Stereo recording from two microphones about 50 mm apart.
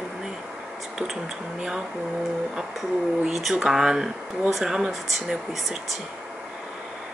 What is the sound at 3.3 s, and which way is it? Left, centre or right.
Speech, centre.